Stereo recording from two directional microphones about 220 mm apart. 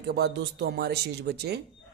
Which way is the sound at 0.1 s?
50° right (ahead or behind).